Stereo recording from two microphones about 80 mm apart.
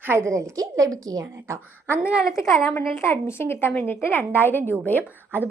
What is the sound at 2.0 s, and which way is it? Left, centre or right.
Speech, centre.